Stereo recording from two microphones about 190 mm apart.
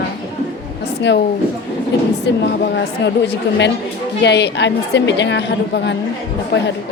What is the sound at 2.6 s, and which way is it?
A woman's voice, 60° left (ahead or behind).